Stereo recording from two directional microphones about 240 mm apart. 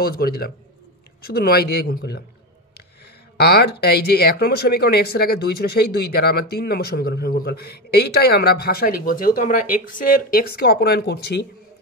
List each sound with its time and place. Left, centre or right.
0.0 s speech: left
3.3 s speech: left